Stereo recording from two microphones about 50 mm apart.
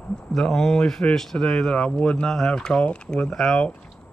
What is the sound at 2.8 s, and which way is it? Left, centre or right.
Speech, left.